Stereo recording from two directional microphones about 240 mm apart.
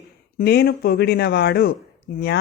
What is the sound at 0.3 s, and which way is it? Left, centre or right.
Speech, left.